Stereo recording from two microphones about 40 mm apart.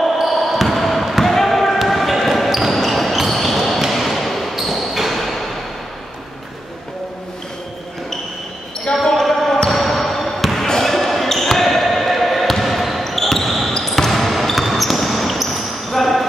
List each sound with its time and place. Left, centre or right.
0.0 s basketball bounce: centre
9.0 s basketball bounce: centre